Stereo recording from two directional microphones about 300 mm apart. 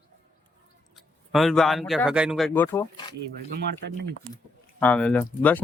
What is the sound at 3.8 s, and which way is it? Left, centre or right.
Speech, right.